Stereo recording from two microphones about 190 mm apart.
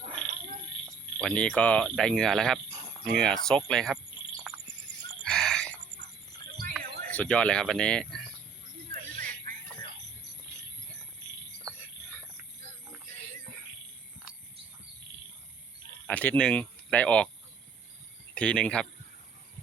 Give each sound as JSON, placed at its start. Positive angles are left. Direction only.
{"t": 1.2, "sound": "speech", "side_deg": 5}
{"t": 5.2, "sound": "fowl", "side_deg": 5}
{"t": 6.7, "sound": "speech", "side_deg": 5}
{"t": 8.9, "sound": "a sound", "side_deg": -40}
{"t": 11.6, "sound": "cricket", "side_deg": -20}
{"t": 16.0, "sound": "speech", "side_deg": 5}
{"t": 18.3, "sound": "speech", "side_deg": 5}